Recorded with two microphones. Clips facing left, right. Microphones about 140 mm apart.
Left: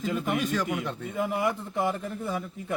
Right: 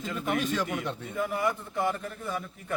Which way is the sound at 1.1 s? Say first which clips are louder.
Left 2 dB; 15° left (ahead or behind).